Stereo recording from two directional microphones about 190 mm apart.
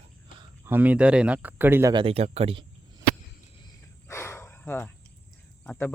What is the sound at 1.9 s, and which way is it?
Speech, 30° right (ahead or behind).